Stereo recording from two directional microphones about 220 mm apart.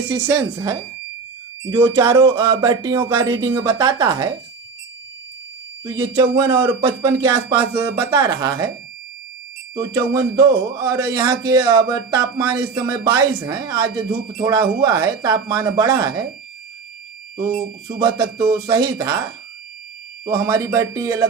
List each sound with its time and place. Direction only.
0.1 s speech: 10° right (ahead or behind)
5.8 s speech: 20° right (ahead or behind)
9.7 s speech: 15° right (ahead or behind)
17.5 s speech: 20° right (ahead or behind)
20.2 s speech: 15° right (ahead or behind)